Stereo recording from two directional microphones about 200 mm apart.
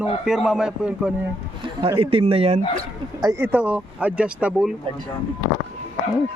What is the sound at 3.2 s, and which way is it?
Speech, 15° right (ahead or behind).